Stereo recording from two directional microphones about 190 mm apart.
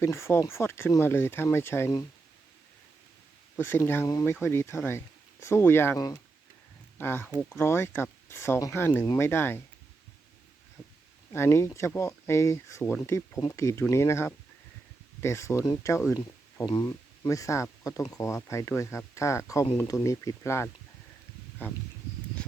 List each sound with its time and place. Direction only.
0.0 s speech: 15° left (ahead or behind)
3.5 s speech: 10° left (ahead or behind)
11.3 s speech: 15° left (ahead or behind)